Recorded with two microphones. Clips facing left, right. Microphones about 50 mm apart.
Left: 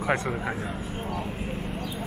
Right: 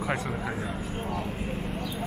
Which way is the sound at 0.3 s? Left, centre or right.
Centre.